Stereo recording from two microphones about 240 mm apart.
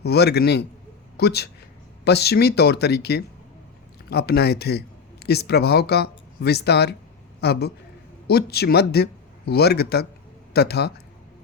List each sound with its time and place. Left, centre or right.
0.0 s speech: left